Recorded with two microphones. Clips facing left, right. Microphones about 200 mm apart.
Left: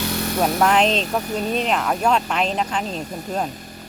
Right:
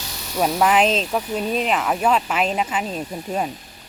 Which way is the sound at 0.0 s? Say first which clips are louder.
Left 12 dB; 60° left (ahead or behind).